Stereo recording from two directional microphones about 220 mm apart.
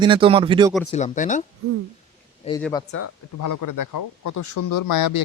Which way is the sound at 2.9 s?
60° left (ahead or behind).